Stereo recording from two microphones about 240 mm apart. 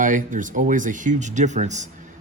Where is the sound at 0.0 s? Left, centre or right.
Right.